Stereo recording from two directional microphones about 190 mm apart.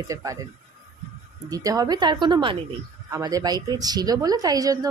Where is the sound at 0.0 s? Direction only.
15° right (ahead or behind).